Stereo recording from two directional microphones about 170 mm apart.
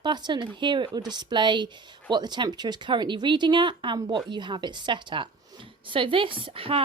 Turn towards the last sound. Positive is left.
turn(degrees=-30)  # may be behind; listen again after turning